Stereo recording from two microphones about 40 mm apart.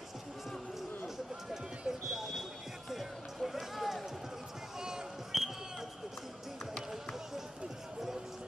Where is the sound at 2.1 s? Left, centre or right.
Centre.